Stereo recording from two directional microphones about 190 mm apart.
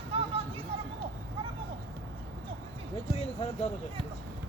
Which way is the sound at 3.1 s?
35° left (ahead or behind).